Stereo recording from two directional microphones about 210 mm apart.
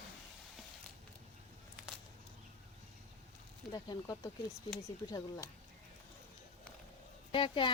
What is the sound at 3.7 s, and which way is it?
Speech, 15° left (ahead or behind).